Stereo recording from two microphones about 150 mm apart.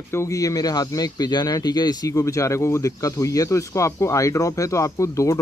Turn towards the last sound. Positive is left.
turn(degrees=20)  # may be behind; listen again after turning